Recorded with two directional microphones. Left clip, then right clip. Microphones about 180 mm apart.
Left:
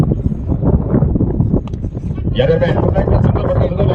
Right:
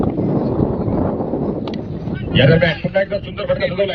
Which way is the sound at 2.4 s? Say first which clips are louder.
Left 1 dB; 60° left (ahead or behind).